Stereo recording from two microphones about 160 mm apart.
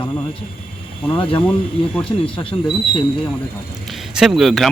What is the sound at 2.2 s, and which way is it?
Speech, 35° left (ahead or behind).